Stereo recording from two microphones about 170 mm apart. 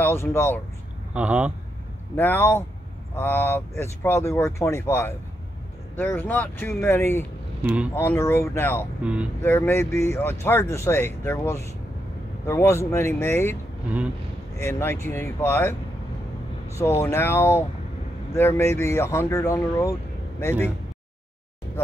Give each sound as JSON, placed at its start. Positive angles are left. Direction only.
{"t": 0.0, "sound": "speech", "side_deg": 15}
{"t": 1.1, "sound": "speech", "side_deg": -10}
{"t": 2.1, "sound": "speech", "side_deg": 10}
{"t": 7.6, "sound": "speech", "side_deg": -5}
{"t": 7.9, "sound": "speech", "side_deg": 15}
{"t": 9.0, "sound": "speech", "side_deg": -5}
{"t": 9.4, "sound": "speech", "side_deg": 10}
{"t": 14.6, "sound": "speech", "side_deg": 15}
{"t": 16.7, "sound": "speech", "side_deg": 15}